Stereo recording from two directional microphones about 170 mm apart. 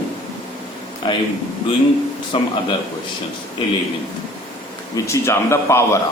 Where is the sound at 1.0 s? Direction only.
30° left (ahead or behind).